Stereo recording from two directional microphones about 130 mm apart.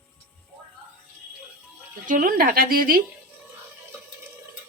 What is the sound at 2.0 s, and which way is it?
Speech, 90° right.